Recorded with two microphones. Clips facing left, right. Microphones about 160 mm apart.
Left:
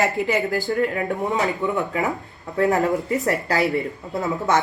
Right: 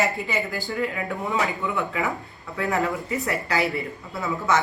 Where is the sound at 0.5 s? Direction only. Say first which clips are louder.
Left 6 dB; 40° left (ahead or behind).